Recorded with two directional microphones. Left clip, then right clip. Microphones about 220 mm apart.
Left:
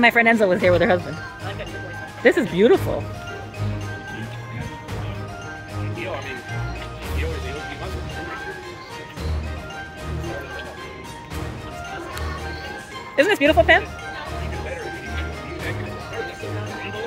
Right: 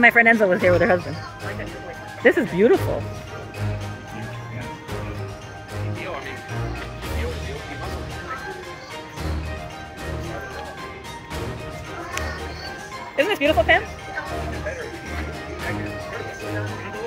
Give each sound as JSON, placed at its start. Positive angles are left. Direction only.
{"t": 0.0, "sound": "speech", "side_deg": 10}
{"t": 2.2, "sound": "speech", "side_deg": 10}
{"t": 13.1, "sound": "speech", "side_deg": 30}